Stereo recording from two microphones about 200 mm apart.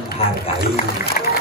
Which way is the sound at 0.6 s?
50° left (ahead or behind).